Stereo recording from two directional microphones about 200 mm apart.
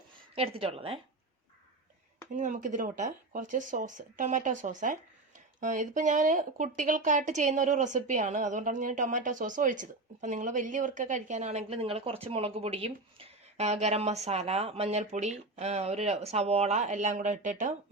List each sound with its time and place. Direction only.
0.3 s a woman's voice: 30° right (ahead or behind)
2.3 s speech: 40° right (ahead or behind)